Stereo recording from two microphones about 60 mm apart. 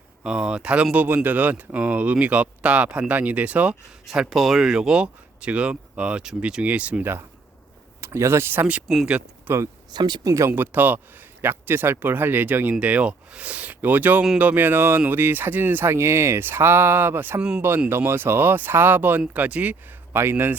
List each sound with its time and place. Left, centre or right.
0.2 s speech: centre
0.9 s speech: right
4.0 s speech: centre; by 7.0 s right
8.0 s speech: right
8.9 s speech: centre
9.5 s speech: right
10.2 s speech: right
10.5 s speech: right
20.1 s speech: right